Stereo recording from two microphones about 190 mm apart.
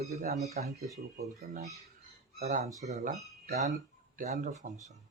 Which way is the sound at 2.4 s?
45° right (ahead or behind).